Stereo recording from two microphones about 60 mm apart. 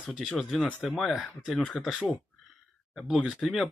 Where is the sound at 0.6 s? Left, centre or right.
Centre.